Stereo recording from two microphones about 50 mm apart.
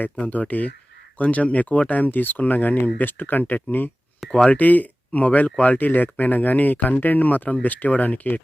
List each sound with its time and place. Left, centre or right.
0.0 s speech: left